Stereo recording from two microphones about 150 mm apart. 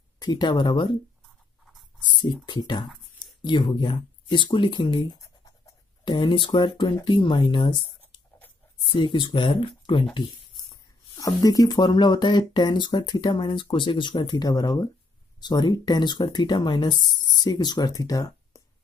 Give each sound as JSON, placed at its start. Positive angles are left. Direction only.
{"t": 0.2, "sound": "speech", "side_deg": 30}
{"t": 2.4, "sound": "speech", "side_deg": 30}
{"t": 11.1, "sound": "speech", "side_deg": 25}